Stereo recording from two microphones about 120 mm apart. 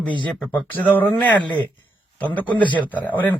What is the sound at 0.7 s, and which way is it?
A man's voice, 15° left (ahead or behind).